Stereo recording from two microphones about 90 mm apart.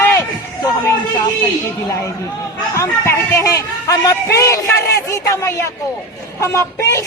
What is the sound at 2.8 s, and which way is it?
A man's voice, 30° left (ahead or behind).